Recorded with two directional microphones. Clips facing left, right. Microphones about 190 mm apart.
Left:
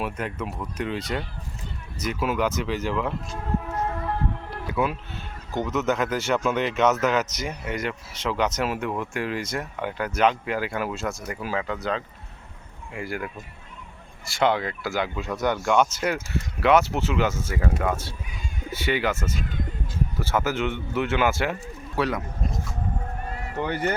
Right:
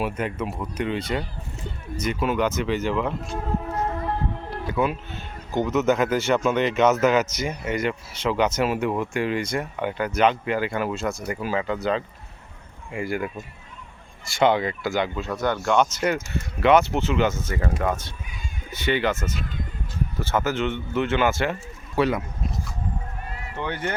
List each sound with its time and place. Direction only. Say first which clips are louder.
0.0 s speech: right 3 dB; centre (ahead or behind)
4.6 s speech: right 2 dB; 5° left (ahead or behind)
23.6 s speech: left 2 dB; 45° left (ahead or behind)